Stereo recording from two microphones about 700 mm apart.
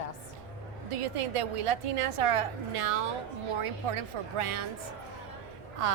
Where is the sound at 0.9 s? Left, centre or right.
Right.